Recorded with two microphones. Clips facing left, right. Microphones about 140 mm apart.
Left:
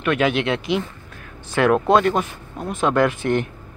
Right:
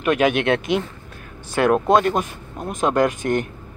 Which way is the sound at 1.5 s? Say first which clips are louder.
Even; 15° right (ahead or behind).